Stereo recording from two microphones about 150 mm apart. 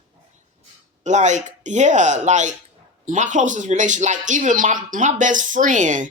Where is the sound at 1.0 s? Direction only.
55° right (ahead or behind).